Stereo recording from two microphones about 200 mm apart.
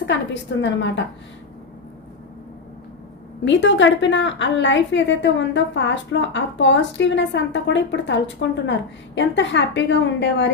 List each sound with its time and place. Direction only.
0.6 s a woman's voice: 65° left (ahead or behind)
3.4 s a woman's voice: 65° left (ahead or behind)